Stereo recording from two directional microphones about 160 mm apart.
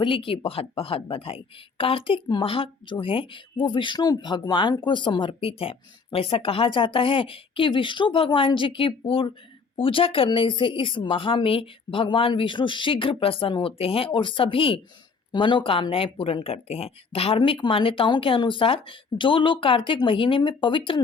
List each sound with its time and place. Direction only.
0.0 s speech: 30° left (ahead or behind)